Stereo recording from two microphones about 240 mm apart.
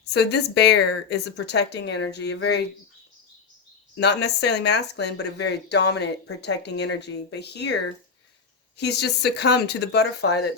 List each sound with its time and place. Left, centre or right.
0.0 s speech: left
3.9 s speech: left
8.8 s speech: left